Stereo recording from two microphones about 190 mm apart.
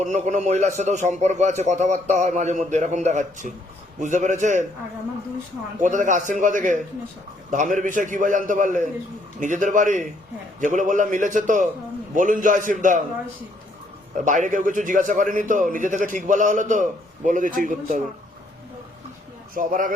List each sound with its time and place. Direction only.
0.0 s a man's voice: 40° right (ahead or behind)
5.8 s a man's voice: 40° right (ahead or behind)
14.3 s a man's voice: 45° right (ahead or behind)
19.5 s a man's voice: 45° right (ahead or behind)